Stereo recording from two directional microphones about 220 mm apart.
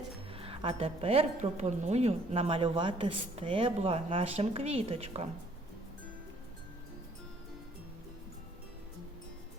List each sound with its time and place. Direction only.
0.3 s speech: 25° right (ahead or behind)